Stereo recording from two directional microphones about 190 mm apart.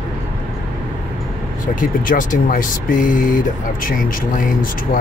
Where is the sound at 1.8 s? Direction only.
45° left (ahead or behind).